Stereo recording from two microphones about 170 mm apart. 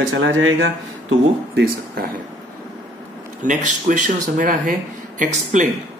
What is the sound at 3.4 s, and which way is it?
Speech, 50° right (ahead or behind).